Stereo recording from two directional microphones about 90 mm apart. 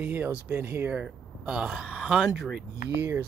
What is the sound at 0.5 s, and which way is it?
Speech, 30° right (ahead or behind).